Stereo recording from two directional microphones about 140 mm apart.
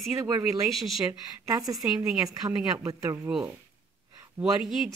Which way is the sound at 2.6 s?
25° right (ahead or behind).